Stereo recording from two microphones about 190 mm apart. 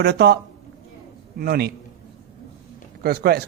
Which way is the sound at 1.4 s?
55° right (ahead or behind).